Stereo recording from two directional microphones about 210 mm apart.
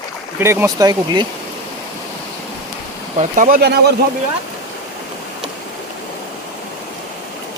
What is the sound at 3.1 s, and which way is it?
Speech, 35° right (ahead or behind).